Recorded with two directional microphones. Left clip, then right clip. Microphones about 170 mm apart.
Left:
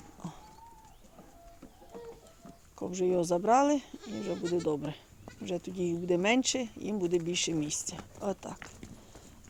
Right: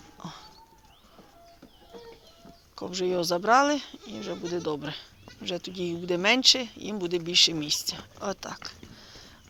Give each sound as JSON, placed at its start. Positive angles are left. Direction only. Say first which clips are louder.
{"t": 2.7, "sound": "speech", "louder": "right 1 dB", "side_deg": 20}